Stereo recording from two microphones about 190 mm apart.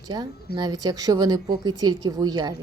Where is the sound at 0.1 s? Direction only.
25° right (ahead or behind).